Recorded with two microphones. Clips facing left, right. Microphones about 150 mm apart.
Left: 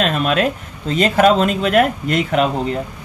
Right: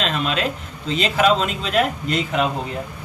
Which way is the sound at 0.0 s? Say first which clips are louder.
Left 5 dB; 50° left (ahead or behind).